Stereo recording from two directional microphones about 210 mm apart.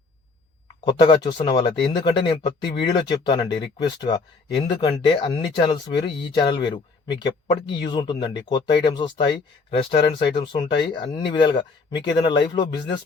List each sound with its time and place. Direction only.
0.9 s speech: 20° left (ahead or behind)